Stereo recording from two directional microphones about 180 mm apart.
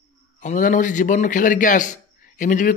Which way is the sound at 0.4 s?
45° left (ahead or behind).